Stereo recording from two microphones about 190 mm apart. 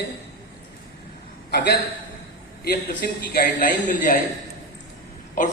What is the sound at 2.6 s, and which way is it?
A man's voice, 55° left (ahead or behind).